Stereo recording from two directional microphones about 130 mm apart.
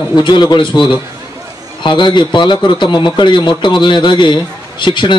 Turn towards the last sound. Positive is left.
turn(degrees=35)  # may be behind; listen again after turning